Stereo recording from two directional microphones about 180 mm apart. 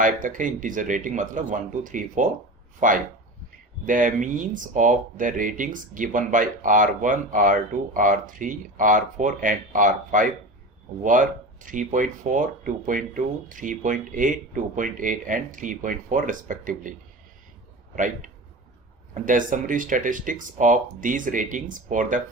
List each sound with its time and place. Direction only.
0.0 s speech: 45° right (ahead or behind)
17.9 s speech: 45° right (ahead or behind)